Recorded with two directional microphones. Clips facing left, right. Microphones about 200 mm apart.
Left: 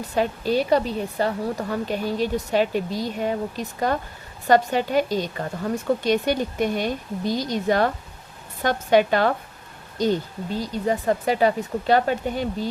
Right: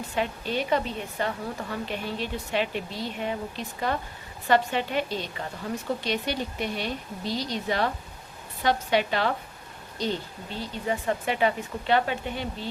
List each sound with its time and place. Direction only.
0.1 s a woman's voice: 40° left (ahead or behind)